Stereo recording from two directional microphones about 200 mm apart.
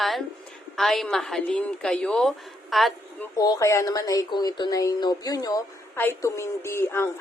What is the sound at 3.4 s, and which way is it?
Speech, 20° left (ahead or behind).